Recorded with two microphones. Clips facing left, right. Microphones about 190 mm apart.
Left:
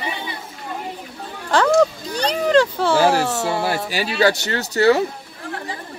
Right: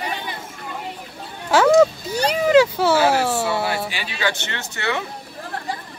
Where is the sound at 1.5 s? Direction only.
5° right (ahead or behind).